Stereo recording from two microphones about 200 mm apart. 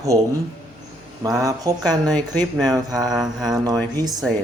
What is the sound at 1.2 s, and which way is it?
Speech, 15° right (ahead or behind).